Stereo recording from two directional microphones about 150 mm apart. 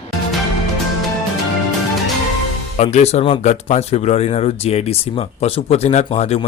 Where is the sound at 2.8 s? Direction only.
50° left (ahead or behind).